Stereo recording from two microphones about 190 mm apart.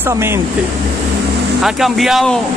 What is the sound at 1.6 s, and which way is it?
Speech, centre (ahead or behind).